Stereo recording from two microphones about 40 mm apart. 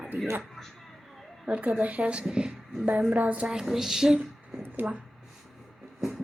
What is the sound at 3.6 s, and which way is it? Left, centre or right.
Speech, centre.